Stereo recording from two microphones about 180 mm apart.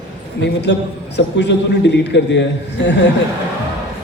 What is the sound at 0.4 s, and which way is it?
A man's voice, 70° left (ahead or behind).